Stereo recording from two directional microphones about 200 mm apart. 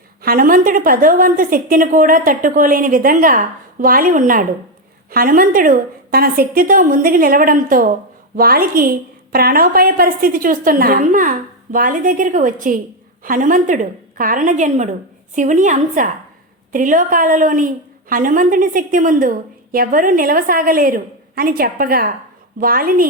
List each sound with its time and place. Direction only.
0.2 s a woman's voice: 45° right (ahead or behind)